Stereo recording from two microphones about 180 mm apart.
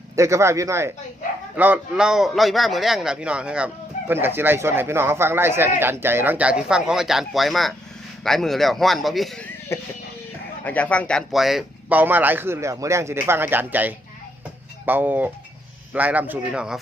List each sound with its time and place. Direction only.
0.2 s a man's voice: 15° right (ahead or behind); by 9.5 s centre (ahead or behind)
9.7 s speech: 15° left (ahead or behind); by 16.8 s 5° right (ahead or behind)